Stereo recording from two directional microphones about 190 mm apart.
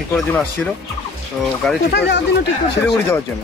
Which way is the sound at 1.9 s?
65° left (ahead or behind).